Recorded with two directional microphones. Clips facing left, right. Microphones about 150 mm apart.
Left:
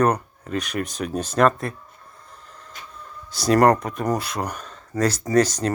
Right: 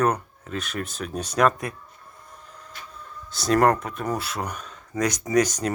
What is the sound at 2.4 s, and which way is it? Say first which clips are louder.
Vehicle: even; 5° right (ahead or behind).